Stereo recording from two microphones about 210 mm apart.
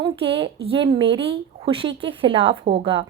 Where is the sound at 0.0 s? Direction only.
25° right (ahead or behind).